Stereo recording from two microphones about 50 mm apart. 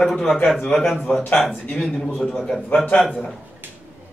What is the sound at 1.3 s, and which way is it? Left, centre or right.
Speech, centre.